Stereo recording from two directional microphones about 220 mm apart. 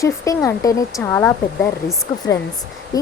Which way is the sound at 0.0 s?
15° left (ahead or behind).